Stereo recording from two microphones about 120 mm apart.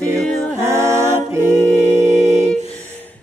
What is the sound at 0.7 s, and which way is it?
A capella, 25° right (ahead or behind).